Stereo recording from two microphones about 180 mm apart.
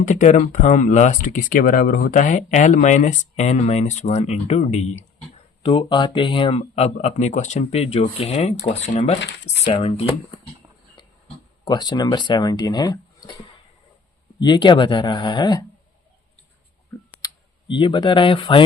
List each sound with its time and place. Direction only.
0.0 s speech: 45° left (ahead or behind)
5.6 s speech: 30° left (ahead or behind)
11.6 s speech: 25° left (ahead or behind)
16.9 s clicking: 10° left (ahead or behind)
17.2 s speech: 25° left (ahead or behind)